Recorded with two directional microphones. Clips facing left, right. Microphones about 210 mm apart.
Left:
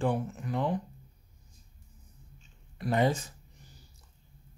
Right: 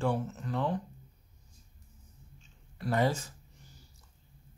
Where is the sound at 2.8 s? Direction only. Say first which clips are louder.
Left 2 dB; 20° left (ahead or behind).